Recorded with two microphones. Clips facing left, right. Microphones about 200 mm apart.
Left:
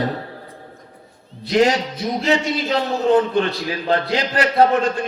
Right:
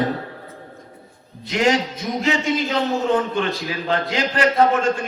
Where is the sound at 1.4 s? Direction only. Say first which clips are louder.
Left 3 dB; 35° left (ahead or behind).